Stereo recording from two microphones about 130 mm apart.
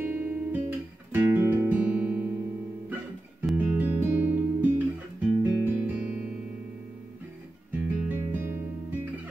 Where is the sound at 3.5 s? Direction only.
15° right (ahead or behind).